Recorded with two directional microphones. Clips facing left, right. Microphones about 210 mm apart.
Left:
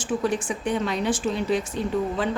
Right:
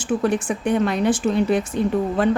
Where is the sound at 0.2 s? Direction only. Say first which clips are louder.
Right 4 dB; 55° right (ahead or behind).